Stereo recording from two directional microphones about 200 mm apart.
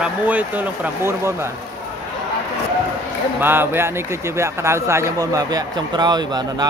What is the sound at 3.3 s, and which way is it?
Speech, 10° right (ahead or behind).